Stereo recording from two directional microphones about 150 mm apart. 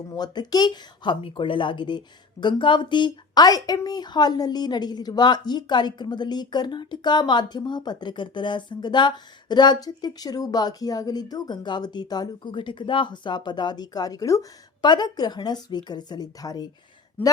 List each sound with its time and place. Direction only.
0.1 s speech: 25° left (ahead or behind)